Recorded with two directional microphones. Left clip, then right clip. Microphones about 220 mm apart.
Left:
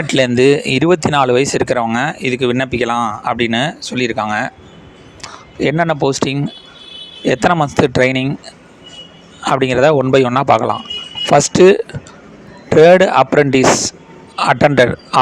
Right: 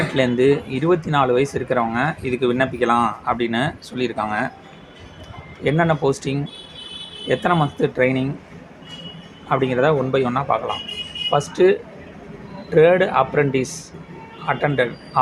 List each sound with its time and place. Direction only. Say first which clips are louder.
0.1 s speech: left 8 dB; 45° left (ahead or behind)
9.5 s speech: left 6 dB; 45° left (ahead or behind)